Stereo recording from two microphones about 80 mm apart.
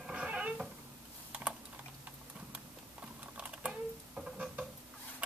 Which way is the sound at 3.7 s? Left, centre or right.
Centre.